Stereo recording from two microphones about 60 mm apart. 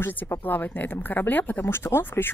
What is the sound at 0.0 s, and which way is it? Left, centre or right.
Speech, left.